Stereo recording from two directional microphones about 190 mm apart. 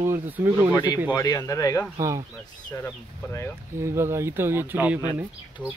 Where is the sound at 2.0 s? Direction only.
15° right (ahead or behind).